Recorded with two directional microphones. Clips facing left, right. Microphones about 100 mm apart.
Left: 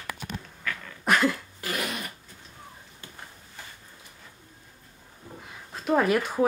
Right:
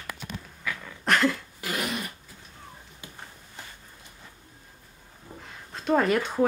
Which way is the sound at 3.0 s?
15° right (ahead or behind).